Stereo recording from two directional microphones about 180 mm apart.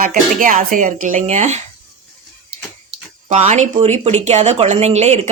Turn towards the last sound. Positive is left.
turn(degrees=-35)  # may be behind; listen again after turning